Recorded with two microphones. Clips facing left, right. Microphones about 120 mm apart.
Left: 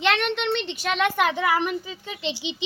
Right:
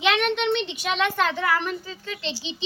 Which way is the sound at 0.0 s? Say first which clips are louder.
Right 1 dB; 10° right (ahead or behind).